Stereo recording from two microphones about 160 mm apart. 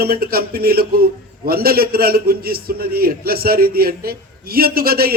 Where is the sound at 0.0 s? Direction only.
70° right (ahead or behind).